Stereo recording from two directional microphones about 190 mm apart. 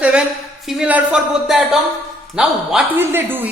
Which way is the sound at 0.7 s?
5° right (ahead or behind).